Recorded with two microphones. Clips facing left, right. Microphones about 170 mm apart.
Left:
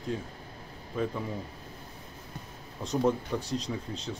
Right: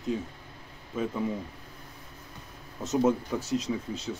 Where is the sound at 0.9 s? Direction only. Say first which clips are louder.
Even; 5° right (ahead or behind).